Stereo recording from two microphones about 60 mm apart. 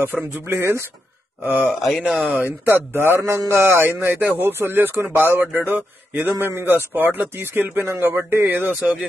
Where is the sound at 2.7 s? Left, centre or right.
Right.